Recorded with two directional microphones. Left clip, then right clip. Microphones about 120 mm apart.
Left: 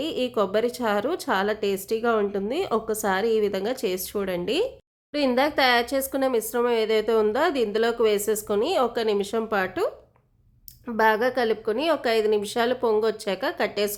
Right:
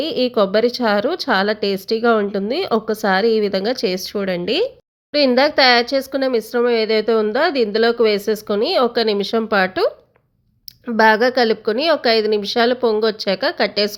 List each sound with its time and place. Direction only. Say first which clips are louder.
0.0 s speech: right 8 dB; 30° right (ahead or behind)
10.9 s speech: right 8 dB; 30° right (ahead or behind)